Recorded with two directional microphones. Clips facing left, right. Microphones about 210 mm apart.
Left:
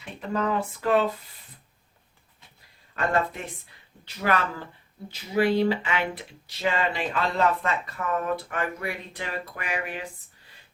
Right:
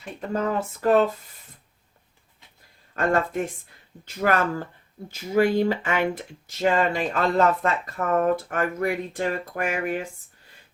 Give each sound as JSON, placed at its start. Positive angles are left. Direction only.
{"t": 0.2, "sound": "speech", "side_deg": -45}
{"t": 2.9, "sound": "speech", "side_deg": -45}